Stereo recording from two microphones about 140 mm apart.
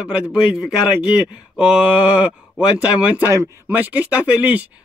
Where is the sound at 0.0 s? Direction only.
10° right (ahead or behind).